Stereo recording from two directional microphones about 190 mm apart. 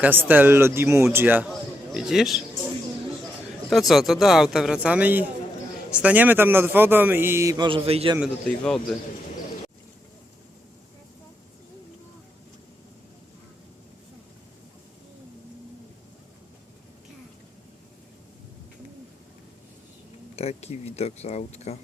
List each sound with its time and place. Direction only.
0.0 s a man's voice: 10° right (ahead or behind)
3.7 s a man's voice: centre (ahead or behind); by 8.1 s 30° right (ahead or behind)
8.4 s speech: 5° left (ahead or behind)
20.3 s speech: 35° left (ahead or behind)